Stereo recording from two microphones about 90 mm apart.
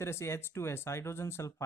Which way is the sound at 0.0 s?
30° left (ahead or behind).